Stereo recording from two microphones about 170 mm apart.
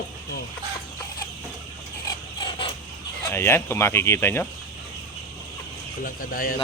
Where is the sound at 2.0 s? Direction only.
30° left (ahead or behind).